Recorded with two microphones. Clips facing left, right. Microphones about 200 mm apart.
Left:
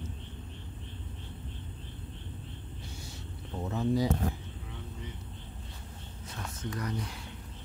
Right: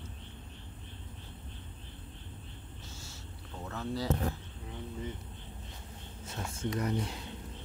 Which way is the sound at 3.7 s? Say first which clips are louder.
Left 5 dB; 15° left (ahead or behind).